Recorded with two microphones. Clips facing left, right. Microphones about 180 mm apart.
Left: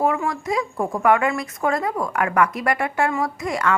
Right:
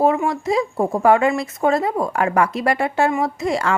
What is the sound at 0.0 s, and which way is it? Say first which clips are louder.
Speech: right 4 dB; 25° right (ahead or behind).